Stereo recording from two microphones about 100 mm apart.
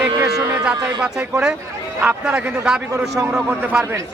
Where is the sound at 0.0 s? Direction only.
30° right (ahead or behind).